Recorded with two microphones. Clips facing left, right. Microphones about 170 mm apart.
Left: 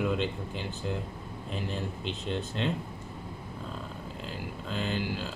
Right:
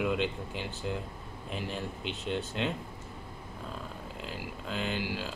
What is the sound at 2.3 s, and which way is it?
Speech, 10° right (ahead or behind).